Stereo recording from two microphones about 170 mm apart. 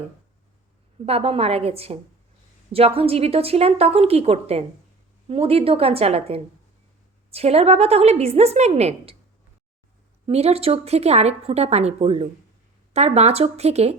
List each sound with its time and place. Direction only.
1.0 s speech: 35° right (ahead or behind)
10.2 s speech: 35° right (ahead or behind)